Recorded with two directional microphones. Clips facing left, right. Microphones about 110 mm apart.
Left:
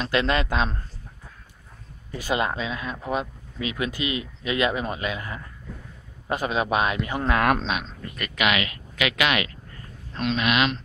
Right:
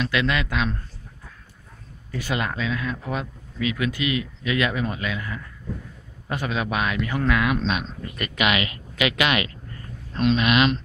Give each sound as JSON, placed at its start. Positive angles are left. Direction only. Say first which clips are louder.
{"t": 0.0, "sound": "a man's voice", "louder": "left 1 dB", "side_deg": 35}
{"t": 2.0, "sound": "speech", "louder": "left 2 dB", "side_deg": 20}
{"t": 8.0, "sound": "speech", "louder": "right 1 dB", "side_deg": -5}